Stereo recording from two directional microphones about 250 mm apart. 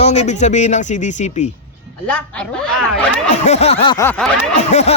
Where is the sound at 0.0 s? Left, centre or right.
Left.